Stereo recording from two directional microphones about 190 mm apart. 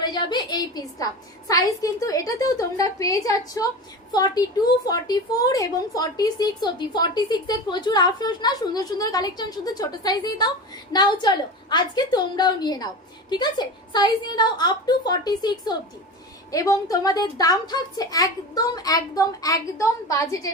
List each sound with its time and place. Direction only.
0.0 s a woman's voice: 25° left (ahead or behind)